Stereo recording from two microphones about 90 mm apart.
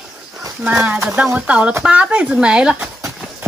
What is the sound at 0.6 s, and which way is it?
Speech, 15° right (ahead or behind).